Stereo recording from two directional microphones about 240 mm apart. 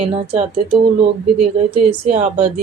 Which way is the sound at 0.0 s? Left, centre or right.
Right.